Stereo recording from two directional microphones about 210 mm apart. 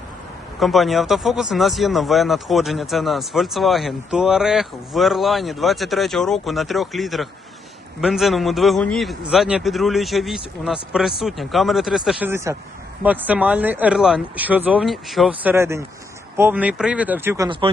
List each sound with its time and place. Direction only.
0.6 s speech: centre (ahead or behind); by 17.7 s 20° right (ahead or behind)